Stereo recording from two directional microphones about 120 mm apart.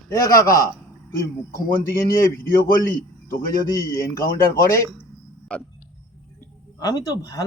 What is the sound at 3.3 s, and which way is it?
Speech, 25° left (ahead or behind).